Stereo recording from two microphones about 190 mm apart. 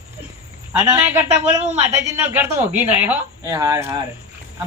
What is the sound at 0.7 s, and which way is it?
Speech, 10° right (ahead or behind).